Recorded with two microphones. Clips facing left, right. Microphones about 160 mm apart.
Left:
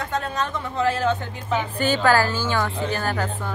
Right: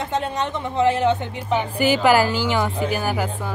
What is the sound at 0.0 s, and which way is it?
Speech, 20° right (ahead or behind).